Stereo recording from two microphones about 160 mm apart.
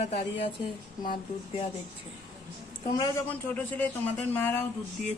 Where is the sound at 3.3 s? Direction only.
10° left (ahead or behind).